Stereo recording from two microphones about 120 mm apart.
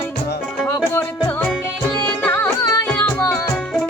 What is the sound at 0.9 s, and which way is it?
Music, 15° left (ahead or behind).